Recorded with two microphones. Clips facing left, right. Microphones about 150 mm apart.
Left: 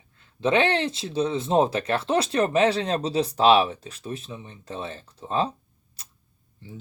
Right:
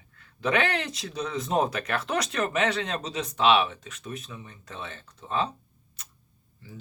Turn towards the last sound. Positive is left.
turn(degrees=30)  # may be behind; listen again after turning